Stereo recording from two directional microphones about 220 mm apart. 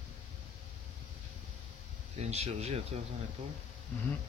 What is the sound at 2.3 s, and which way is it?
Speech, 30° right (ahead or behind).